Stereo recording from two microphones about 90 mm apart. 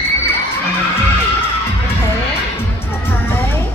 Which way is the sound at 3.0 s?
25° left (ahead or behind).